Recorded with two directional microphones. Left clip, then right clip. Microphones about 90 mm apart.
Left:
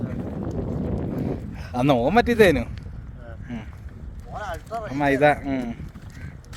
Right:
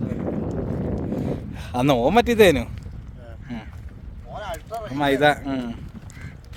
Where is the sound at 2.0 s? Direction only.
45° right (ahead or behind).